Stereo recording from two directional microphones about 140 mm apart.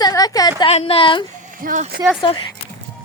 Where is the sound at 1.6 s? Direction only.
75° right (ahead or behind).